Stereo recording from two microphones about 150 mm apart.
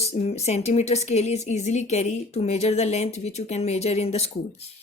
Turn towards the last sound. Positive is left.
turn(degrees=45)  # may be behind; listen again after turning